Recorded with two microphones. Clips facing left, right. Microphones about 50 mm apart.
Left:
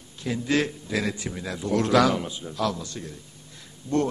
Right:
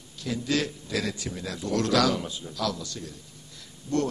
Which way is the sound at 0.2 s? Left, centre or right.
Left.